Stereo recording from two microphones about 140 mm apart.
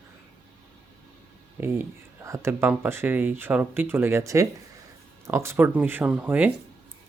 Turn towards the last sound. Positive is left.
turn(degrees=-15)  # may be behind; listen again after turning